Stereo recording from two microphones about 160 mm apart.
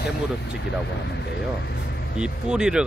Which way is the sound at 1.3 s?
90° left.